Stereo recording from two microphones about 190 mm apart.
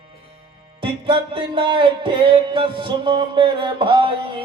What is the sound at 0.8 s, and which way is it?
Music, 25° right (ahead or behind).